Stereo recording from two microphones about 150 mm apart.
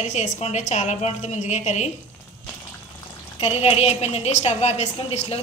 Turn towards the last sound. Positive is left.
turn(degrees=45)  # may be behind; listen again after turning